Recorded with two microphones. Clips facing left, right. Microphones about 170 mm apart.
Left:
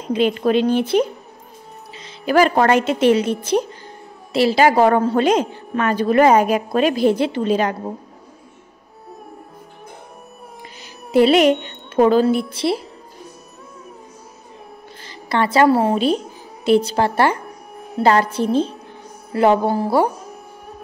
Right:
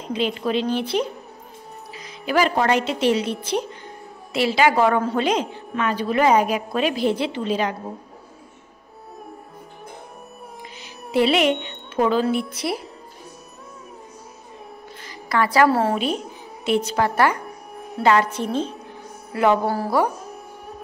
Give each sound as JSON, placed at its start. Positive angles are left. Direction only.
{"t": 0.1, "sound": "a woman's voice", "side_deg": 55}
{"t": 2.2, "sound": "a woman's voice", "side_deg": 50}
{"t": 11.1, "sound": "a woman's voice", "side_deg": 40}
{"t": 15.0, "sound": "a sound", "side_deg": 25}
{"t": 15.7, "sound": "a woman's voice", "side_deg": 15}
{"t": 16.6, "sound": "a woman's voice", "side_deg": 35}